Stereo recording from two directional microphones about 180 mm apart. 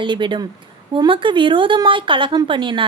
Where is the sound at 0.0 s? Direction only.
25° right (ahead or behind).